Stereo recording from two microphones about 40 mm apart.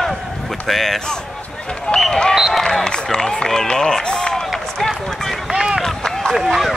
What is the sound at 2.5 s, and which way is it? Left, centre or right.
Speech, centre.